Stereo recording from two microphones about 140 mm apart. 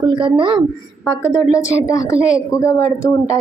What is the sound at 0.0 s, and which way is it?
Speech, 35° right (ahead or behind).